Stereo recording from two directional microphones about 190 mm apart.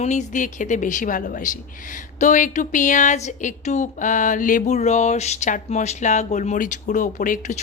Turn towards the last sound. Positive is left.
turn(degrees=45)  # may be behind; listen again after turning